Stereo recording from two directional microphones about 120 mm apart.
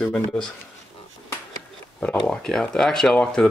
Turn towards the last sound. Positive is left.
turn(degrees=5)  # may be behind; listen again after turning